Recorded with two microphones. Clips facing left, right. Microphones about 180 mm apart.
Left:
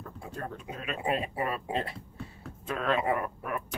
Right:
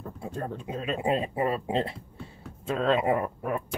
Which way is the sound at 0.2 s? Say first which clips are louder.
Right 5 dB; 30° right (ahead or behind).